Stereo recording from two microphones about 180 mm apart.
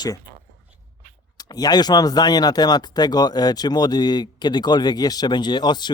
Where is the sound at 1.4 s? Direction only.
20° left (ahead or behind).